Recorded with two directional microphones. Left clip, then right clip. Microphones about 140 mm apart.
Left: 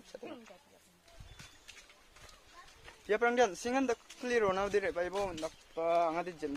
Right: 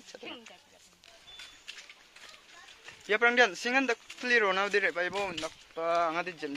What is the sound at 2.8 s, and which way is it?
Speech, 5° left (ahead or behind).